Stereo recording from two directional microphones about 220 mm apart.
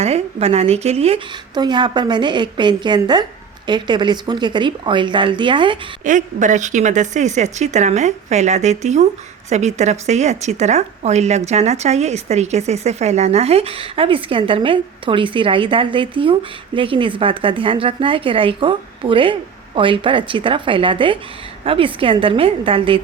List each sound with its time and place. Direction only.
0.0 s a woman's voice: 30° right (ahead or behind)
6.1 s a woman's voice: 35° right (ahead or behind)